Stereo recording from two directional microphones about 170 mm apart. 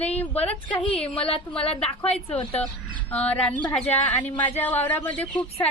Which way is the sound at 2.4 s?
35° left (ahead or behind).